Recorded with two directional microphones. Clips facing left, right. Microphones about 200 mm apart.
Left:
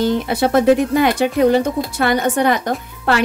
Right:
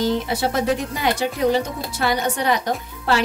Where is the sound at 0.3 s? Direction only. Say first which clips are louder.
Left 8 dB; 55° left (ahead or behind).